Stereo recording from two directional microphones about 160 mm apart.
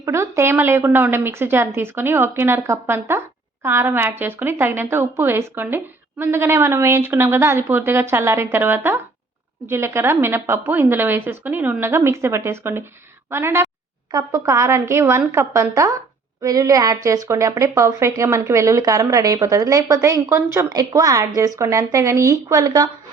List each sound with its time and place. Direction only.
0.0 s a woman's voice: 15° right (ahead or behind)